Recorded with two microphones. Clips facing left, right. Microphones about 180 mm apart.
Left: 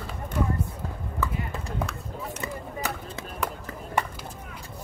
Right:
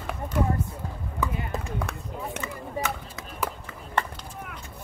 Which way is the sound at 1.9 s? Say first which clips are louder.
Right 2 dB; 55° right (ahead or behind).